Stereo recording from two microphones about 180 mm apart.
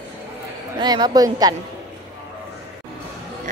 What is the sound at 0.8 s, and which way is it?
Speech, 25° right (ahead or behind).